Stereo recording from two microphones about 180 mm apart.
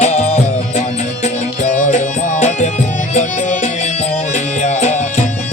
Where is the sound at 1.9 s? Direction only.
40° left (ahead or behind).